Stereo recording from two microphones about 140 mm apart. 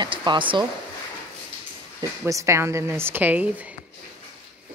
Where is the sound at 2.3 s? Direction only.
20° right (ahead or behind).